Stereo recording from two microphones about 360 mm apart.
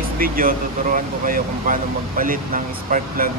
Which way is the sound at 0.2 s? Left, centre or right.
Right.